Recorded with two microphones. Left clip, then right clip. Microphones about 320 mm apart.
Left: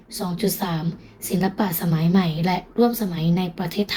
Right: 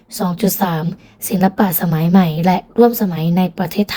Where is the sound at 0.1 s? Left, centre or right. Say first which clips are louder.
Right 6 dB; right.